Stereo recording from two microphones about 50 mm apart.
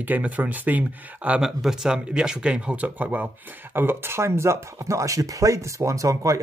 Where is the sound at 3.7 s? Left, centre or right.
Right.